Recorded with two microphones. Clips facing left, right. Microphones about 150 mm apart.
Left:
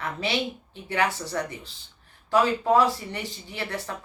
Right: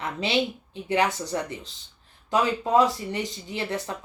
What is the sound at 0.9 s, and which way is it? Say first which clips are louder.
Speech: right 2 dB; 20° right (ahead or behind).